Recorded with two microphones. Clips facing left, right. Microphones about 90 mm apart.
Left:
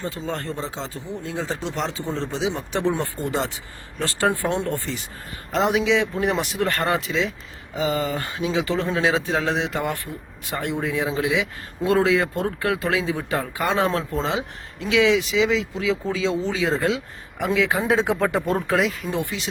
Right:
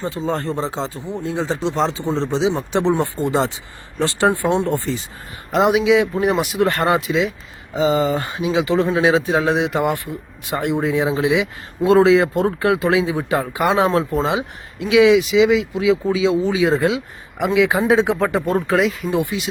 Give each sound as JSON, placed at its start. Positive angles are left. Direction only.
{"t": 0.0, "sound": "speech", "side_deg": -35}
{"t": 13.8, "sound": "speech", "side_deg": -5}
{"t": 19.1, "sound": "speech", "side_deg": -10}